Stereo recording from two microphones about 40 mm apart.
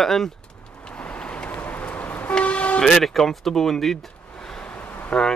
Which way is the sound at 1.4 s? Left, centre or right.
Left.